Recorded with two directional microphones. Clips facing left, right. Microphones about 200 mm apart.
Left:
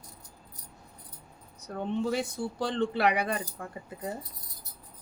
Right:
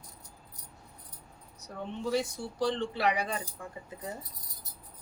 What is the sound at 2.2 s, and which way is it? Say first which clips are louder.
Speech: right 1 dB; 55° left (ahead or behind).